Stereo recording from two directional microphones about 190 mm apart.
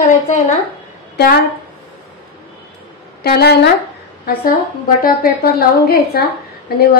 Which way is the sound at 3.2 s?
55° left (ahead or behind).